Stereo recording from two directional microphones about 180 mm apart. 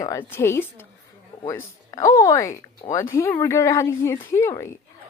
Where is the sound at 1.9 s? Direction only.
20° left (ahead or behind).